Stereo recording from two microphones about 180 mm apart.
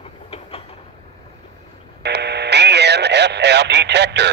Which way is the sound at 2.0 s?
70° right (ahead or behind).